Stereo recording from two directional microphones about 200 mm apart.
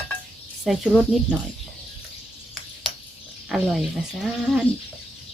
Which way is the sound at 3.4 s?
Centre (ahead or behind).